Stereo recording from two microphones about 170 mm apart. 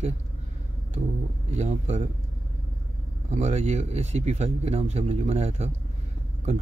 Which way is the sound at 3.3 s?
40° right (ahead or behind).